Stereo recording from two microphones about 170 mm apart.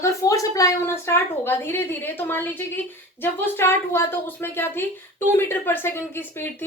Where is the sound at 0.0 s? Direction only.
20° left (ahead or behind).